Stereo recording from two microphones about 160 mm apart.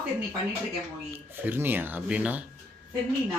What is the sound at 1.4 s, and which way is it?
Speech, 15° right (ahead or behind).